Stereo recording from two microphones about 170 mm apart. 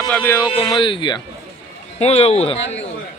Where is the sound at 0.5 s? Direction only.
30° left (ahead or behind).